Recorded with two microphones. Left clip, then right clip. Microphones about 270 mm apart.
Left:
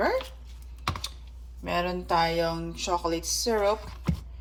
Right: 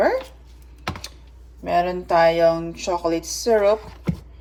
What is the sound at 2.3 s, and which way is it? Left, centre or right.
Speech, left.